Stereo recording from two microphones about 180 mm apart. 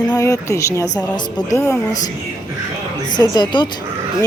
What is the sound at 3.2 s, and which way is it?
Speech, 25° left (ahead or behind).